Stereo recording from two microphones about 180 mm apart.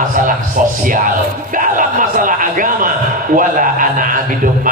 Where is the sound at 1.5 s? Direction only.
50° right (ahead or behind).